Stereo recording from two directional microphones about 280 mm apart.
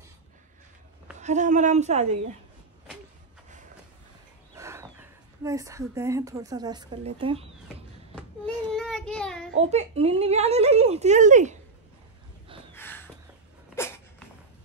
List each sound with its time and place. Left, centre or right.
1.2 s a woman's voice: right
4.6 s speech: centre
8.7 s child singing: centre
9.6 s a woman's voice: right
12.7 s a sound: centre